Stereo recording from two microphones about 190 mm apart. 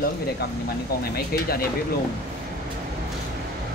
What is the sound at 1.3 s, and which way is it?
Speech, 55° left (ahead or behind).